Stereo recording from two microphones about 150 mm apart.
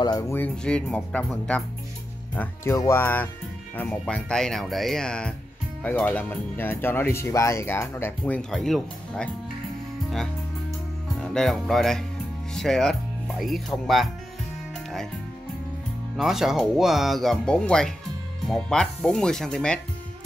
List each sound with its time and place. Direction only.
0.0 s speech: 25° left (ahead or behind); by 9.3 s 5° left (ahead or behind)
11.1 s speech: 5° left (ahead or behind)
16.2 s speech: centre (ahead or behind)